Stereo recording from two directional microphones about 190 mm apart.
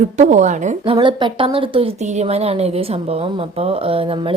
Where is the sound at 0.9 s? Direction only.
25° right (ahead or behind).